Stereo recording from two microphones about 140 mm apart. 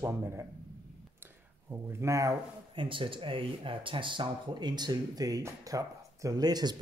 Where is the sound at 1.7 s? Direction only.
20° right (ahead or behind).